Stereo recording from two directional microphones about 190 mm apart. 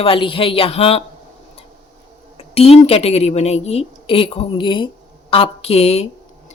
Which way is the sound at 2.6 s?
30° left (ahead or behind).